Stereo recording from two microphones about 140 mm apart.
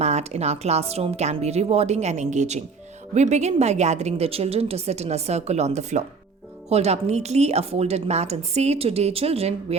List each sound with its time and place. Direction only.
0.0 s speech: 50° right (ahead or behind)